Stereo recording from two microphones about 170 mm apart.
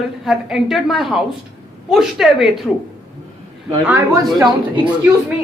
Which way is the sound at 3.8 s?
20° right (ahead or behind).